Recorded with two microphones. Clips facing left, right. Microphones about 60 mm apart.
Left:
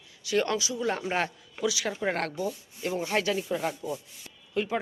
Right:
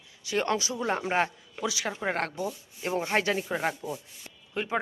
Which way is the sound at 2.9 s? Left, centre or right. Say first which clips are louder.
Right 1 dB; right.